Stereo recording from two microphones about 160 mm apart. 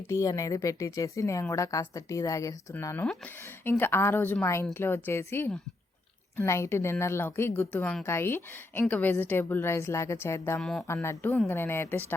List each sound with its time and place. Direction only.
0.1 s a woman's voice: 20° left (ahead or behind)
10.6 s speech: 5° left (ahead or behind)
10.8 s a woman's voice: 15° left (ahead or behind)